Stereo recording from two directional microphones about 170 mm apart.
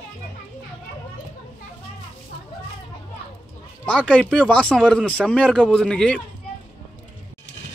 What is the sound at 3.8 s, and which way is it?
Speech, 5° left (ahead or behind).